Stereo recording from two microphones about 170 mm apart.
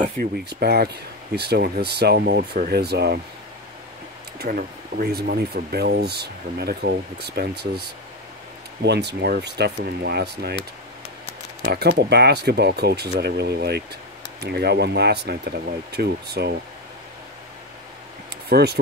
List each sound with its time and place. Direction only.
0.2 s speech: 70° right (ahead or behind)
4.4 s speech: 60° right (ahead or behind); by 10.5 s 75° right (ahead or behind)
11.7 s speech: 70° right (ahead or behind)
18.5 s speech: 70° right (ahead or behind)